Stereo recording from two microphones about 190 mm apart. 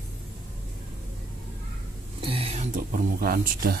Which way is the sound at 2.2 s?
30° right (ahead or behind).